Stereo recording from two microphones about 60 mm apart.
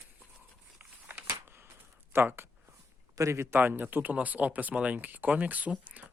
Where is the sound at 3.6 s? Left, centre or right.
Right.